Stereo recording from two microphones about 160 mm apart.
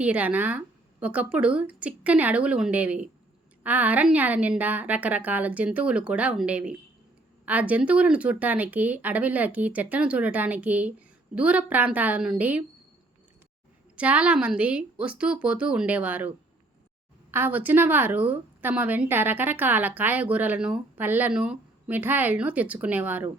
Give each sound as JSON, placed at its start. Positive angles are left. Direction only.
{"t": 0.0, "sound": "a woman's voice", "side_deg": -10}
{"t": 13.9, "sound": "a woman's voice", "side_deg": -10}
{"t": 17.3, "sound": "a woman's voice", "side_deg": -10}